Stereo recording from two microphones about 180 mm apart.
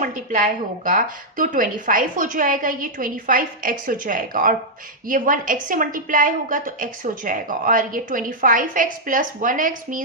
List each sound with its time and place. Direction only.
0.0 s a woman's voice: 45° right (ahead or behind)